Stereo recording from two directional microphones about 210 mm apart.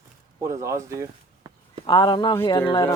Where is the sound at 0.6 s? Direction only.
15° right (ahead or behind).